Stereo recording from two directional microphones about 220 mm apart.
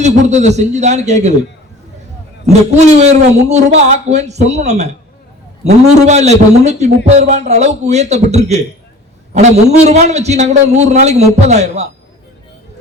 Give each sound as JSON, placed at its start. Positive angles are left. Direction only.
{"t": 0.0, "sound": "a man's voice", "side_deg": -30}
{"t": 2.5, "sound": "a man's voice", "side_deg": -30}